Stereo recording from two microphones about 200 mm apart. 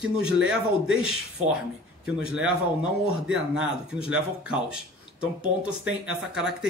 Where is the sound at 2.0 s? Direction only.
5° right (ahead or behind).